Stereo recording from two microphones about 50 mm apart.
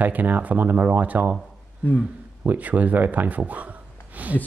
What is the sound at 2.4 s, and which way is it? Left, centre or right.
Speech, right.